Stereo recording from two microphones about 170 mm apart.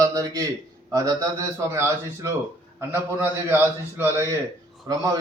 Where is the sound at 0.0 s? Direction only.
20° right (ahead or behind).